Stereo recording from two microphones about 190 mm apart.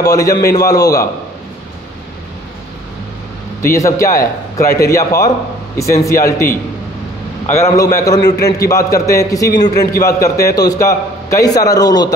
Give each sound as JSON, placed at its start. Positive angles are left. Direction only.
{"t": 0.0, "sound": "a man's voice", "side_deg": 15}
{"t": 3.6, "sound": "a man's voice", "side_deg": 15}
{"t": 7.5, "sound": "a man's voice", "side_deg": 15}